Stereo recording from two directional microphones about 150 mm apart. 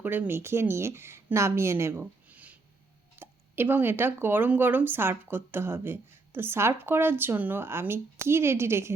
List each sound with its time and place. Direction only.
0.0 s speech: 15° right (ahead or behind)